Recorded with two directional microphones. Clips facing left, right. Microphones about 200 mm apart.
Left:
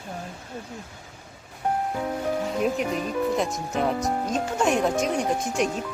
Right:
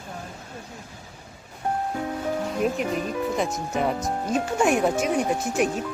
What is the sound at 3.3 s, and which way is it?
Speech, centre (ahead or behind).